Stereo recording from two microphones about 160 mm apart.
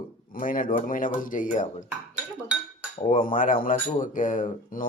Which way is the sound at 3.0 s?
55° left (ahead or behind).